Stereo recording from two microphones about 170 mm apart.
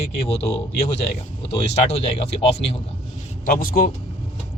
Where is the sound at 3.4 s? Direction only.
60° left (ahead or behind).